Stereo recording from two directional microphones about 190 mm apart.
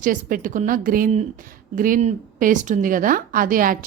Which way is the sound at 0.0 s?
45° right (ahead or behind).